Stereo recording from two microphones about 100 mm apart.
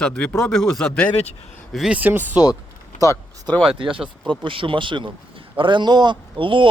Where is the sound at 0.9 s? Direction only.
15° left (ahead or behind).